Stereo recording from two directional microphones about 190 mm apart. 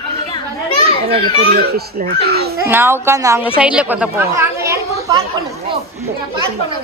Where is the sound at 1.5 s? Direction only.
55° right (ahead or behind).